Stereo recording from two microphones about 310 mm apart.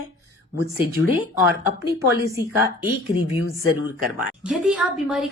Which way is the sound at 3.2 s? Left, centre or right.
Left.